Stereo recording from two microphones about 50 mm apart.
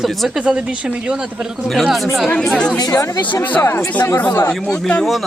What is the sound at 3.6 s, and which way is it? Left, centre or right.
Speech, left.